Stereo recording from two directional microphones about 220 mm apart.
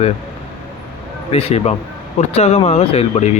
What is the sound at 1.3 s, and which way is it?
Speech, 30° left (ahead or behind).